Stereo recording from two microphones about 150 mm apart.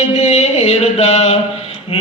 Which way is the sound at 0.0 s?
50° left (ahead or behind).